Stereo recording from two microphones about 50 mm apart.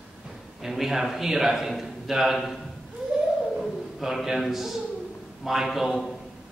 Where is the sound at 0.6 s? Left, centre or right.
Centre.